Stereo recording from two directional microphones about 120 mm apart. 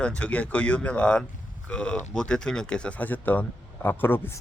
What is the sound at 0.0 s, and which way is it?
Speech, 10° left (ahead or behind).